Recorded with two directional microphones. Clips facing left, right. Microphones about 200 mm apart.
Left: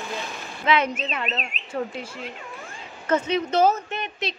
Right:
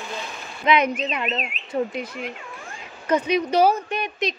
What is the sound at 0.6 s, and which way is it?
Speech, 15° right (ahead or behind).